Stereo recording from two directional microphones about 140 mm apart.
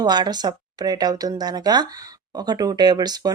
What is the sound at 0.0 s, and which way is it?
Speech, 30° right (ahead or behind).